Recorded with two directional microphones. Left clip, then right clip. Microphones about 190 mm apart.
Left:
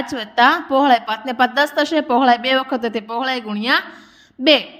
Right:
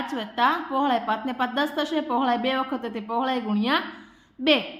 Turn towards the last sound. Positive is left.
turn(degrees=35)  # may be behind; listen again after turning